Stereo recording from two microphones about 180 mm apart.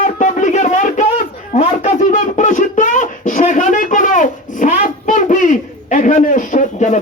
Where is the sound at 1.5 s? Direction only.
45° left (ahead or behind).